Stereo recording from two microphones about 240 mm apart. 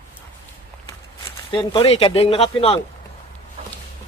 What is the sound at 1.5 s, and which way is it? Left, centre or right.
Speech, left.